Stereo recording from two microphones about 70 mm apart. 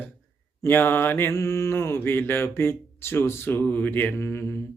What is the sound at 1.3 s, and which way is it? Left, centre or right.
Speech, left.